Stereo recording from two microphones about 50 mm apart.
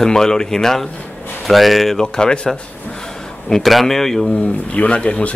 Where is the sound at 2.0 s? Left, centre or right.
Centre.